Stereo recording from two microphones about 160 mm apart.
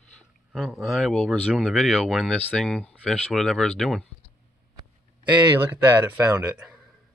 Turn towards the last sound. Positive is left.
turn(degrees=-5)  # may be behind; listen again after turning